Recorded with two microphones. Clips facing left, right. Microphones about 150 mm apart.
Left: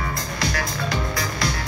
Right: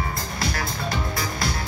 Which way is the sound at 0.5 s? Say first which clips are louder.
Left 2 dB; 25° right (ahead or behind).